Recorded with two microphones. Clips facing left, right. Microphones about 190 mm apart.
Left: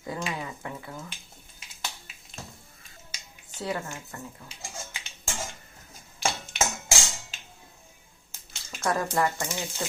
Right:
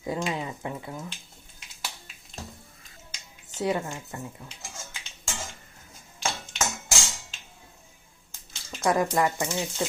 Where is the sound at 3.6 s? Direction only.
20° right (ahead or behind).